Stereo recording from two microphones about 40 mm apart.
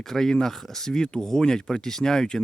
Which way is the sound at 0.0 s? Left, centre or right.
Centre.